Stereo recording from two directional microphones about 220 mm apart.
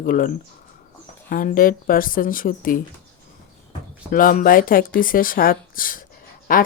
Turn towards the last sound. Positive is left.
turn(degrees=40)  # may be behind; listen again after turning